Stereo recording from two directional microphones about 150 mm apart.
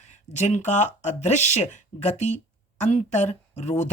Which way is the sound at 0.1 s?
50° left (ahead or behind).